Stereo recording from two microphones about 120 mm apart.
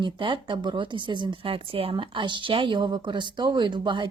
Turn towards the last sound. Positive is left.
turn(degrees=-40)  # may be behind; listen again after turning